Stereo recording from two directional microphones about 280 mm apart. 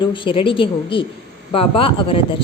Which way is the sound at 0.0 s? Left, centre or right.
Centre.